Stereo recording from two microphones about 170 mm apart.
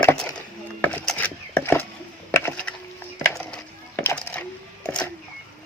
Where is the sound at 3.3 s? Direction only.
10° left (ahead or behind).